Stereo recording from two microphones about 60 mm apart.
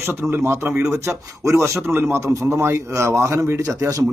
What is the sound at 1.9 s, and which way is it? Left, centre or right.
Speech, right.